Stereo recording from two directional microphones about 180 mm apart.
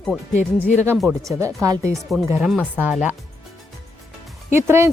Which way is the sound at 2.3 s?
Centre (ahead or behind).